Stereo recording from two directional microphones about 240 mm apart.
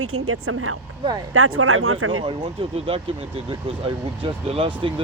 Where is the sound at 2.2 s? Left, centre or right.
Right.